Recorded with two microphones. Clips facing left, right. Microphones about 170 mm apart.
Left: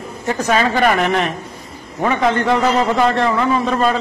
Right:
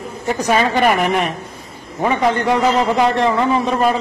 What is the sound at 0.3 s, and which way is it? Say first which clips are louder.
A man's voice: even; 15° right (ahead or behind).